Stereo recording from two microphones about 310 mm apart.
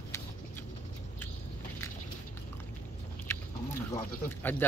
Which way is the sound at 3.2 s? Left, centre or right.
Centre.